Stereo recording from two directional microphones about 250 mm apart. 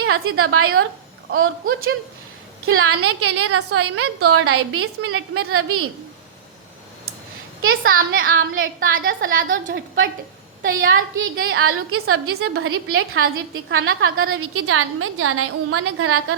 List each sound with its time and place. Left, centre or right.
0.0 s a woman's voice: right
7.6 s a woman's voice: right
10.6 s a woman's voice: right
11.1 s a woman's voice: right